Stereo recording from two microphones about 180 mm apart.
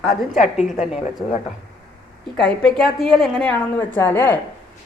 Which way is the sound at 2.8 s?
Centre (ahead or behind).